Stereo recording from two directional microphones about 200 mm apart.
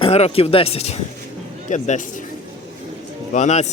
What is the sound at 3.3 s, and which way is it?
Speech, 35° left (ahead or behind).